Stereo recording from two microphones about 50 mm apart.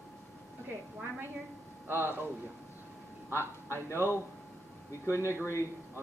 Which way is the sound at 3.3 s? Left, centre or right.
Left.